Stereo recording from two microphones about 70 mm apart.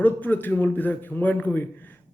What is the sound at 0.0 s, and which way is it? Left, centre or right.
Speech, left.